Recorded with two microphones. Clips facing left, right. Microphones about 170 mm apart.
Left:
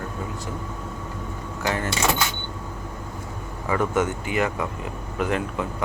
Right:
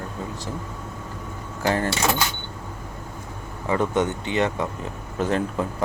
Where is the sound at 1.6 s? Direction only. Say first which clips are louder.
Right 4 dB; 35° right (ahead or behind).